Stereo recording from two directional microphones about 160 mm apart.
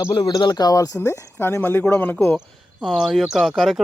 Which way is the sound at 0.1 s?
25° left (ahead or behind).